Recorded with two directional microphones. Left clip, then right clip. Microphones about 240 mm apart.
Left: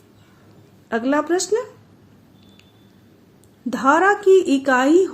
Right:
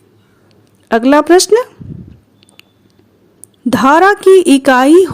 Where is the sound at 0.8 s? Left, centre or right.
Right.